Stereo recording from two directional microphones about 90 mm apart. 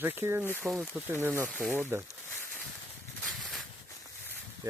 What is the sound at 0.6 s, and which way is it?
Speech, 5° right (ahead or behind).